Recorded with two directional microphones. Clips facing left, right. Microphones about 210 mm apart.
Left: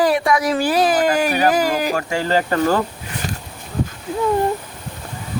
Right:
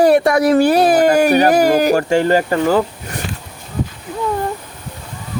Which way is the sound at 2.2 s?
50° right (ahead or behind).